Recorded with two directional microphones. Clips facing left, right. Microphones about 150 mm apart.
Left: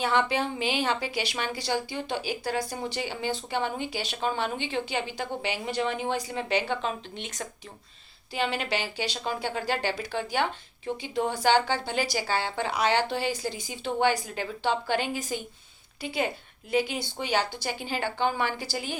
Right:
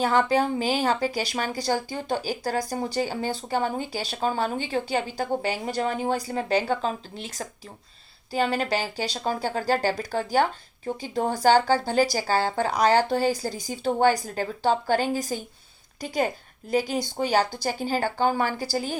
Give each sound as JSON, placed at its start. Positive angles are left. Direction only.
{"t": 0.0, "sound": "a woman's voice", "side_deg": -40}